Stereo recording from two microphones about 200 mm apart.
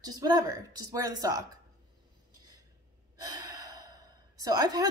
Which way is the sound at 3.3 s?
20° right (ahead or behind).